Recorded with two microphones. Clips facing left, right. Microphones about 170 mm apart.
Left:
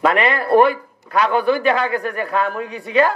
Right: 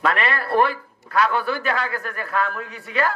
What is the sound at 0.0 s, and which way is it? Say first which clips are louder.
A man's voice: left 5 dB; 20° left (ahead or behind).